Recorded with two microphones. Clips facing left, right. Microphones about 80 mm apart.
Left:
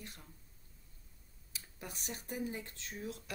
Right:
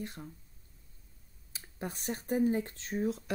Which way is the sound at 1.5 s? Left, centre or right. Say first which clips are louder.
Right 8 dB; right.